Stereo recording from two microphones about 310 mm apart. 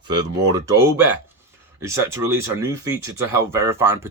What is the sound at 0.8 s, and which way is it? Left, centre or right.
Speech, centre.